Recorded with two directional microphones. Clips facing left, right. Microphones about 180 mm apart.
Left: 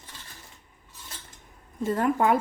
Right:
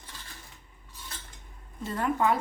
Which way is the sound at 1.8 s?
50° left (ahead or behind).